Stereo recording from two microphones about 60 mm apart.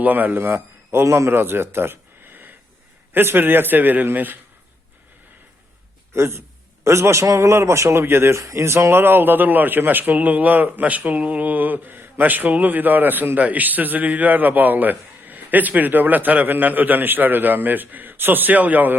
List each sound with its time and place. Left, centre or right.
0.0 s a man's voice: right
6.1 s speech: right
8.4 s a man's voice: right